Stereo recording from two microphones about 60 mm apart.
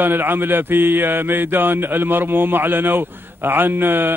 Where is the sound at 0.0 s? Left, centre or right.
Right.